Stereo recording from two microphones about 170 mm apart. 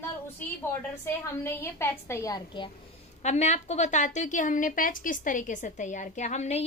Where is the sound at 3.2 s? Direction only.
40° left (ahead or behind).